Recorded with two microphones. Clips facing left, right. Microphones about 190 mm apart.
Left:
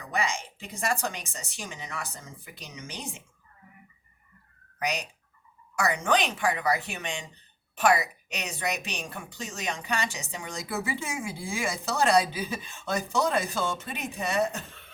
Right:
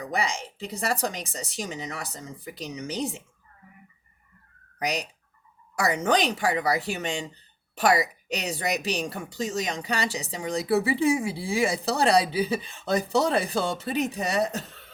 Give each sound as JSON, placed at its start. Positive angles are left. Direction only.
{"t": 0.0, "sound": "a woman's voice", "side_deg": -35}
{"t": 4.8, "sound": "a woman's voice", "side_deg": -35}